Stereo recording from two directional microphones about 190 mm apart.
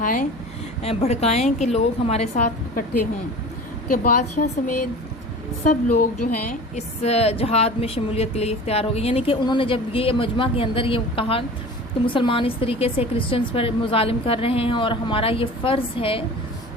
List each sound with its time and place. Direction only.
0.0 s speech: 45° left (ahead or behind)
0.8 s a woman's voice: 35° left (ahead or behind)
3.8 s a woman's voice: 50° left (ahead or behind)
6.5 s a woman's voice: 35° left (ahead or behind)